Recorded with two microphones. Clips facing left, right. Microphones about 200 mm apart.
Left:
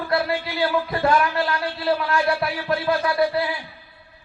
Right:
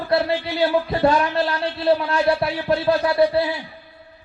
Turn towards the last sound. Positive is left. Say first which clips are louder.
# right 4 dB
turn(degrees=-25)  # may be behind; listen again after turning